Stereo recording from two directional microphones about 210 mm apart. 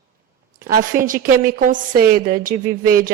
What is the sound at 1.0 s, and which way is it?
Speech, 40° right (ahead or behind).